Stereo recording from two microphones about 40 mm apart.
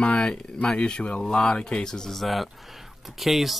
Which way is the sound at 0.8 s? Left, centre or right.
Left.